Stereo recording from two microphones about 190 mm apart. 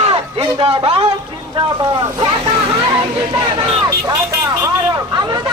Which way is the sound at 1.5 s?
20° right (ahead or behind).